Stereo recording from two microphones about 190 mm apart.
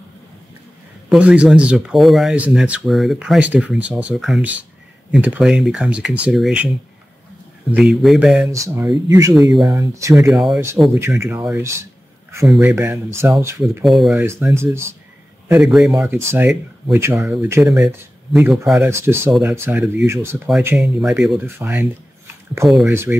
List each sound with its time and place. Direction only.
1.0 s speech: 5° right (ahead or behind)
7.7 s speech: centre (ahead or behind)
8.5 s speech: 15° right (ahead or behind)
10.3 s speech: centre (ahead or behind)
11.0 s speech: 15° right (ahead or behind)
13.8 s speech: centre (ahead or behind)
14.2 s speech: 15° right (ahead or behind)